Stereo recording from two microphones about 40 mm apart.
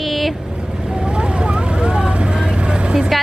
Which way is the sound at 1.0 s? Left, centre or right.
Right.